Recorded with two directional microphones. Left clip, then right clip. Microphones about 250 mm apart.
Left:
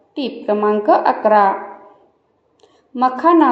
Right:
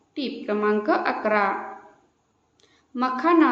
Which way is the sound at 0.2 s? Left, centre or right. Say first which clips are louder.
Left 8 dB; centre.